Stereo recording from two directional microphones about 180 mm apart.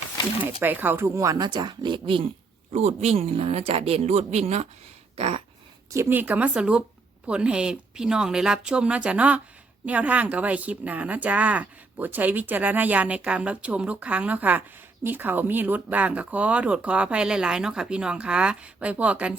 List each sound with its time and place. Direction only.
0.6 s speech: 10° right (ahead or behind); by 4.7 s 35° right (ahead or behind)
5.1 s a sound: 35° right (ahead or behind)
5.9 s speech: 15° right (ahead or behind)